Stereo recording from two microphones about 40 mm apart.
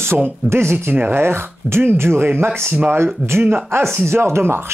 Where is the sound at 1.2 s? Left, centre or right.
Right.